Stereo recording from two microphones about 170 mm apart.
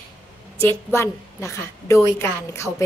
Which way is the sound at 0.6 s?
15° left (ahead or behind).